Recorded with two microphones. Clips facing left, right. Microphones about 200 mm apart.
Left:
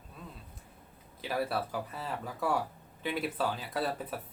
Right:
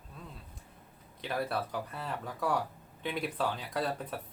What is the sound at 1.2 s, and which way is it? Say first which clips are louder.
Speech: left 1 dB; 5° left (ahead or behind).